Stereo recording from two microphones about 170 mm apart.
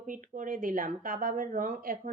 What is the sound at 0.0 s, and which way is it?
Speech, 50° right (ahead or behind).